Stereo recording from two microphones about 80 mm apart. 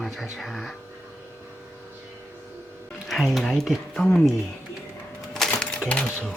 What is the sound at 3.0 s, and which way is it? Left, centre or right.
Speech, centre.